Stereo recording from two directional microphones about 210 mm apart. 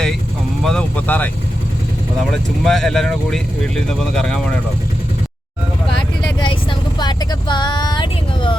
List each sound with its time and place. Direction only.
0.6 s speech: 5° left (ahead or behind)
2.3 s speech: centre (ahead or behind)
5.9 s vehicle: 20° left (ahead or behind)